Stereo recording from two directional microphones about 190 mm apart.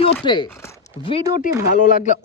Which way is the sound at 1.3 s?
45° left (ahead or behind).